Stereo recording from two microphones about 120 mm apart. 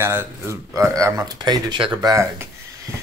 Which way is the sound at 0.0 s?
20° right (ahead or behind).